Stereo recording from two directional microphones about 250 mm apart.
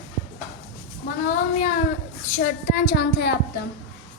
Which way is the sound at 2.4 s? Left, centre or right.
Left.